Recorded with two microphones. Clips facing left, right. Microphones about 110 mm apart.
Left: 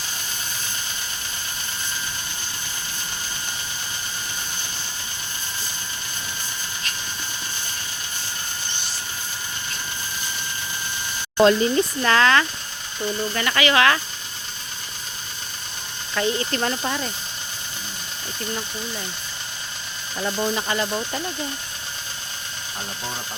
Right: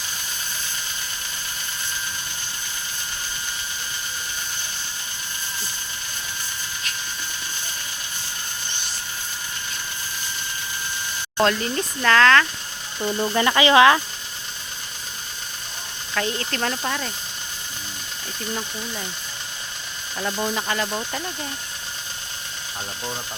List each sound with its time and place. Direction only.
11.3 s speech: 10° left (ahead or behind)
13.0 s speech: 20° right (ahead or behind)
16.1 s speech: 5° left (ahead or behind)
20.3 s speech: centre (ahead or behind)